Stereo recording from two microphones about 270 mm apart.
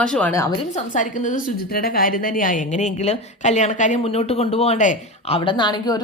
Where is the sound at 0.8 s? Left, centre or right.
Left.